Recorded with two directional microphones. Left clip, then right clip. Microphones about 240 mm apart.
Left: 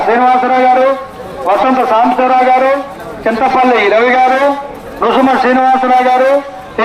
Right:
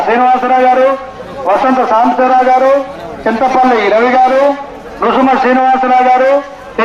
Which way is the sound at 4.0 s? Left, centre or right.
Left.